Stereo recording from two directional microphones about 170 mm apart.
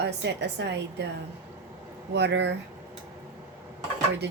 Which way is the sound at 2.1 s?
90° right.